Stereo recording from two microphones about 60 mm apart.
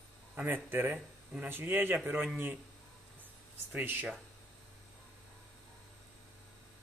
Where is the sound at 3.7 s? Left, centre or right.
Right.